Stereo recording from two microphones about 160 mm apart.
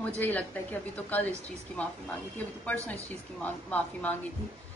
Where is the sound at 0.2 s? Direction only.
10° left (ahead or behind).